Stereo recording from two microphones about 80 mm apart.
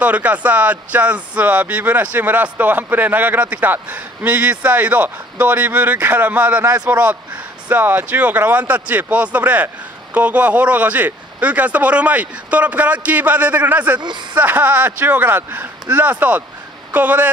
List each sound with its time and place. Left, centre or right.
0.0 s speech: centre